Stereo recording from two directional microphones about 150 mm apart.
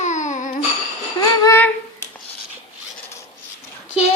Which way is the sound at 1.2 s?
20° left (ahead or behind).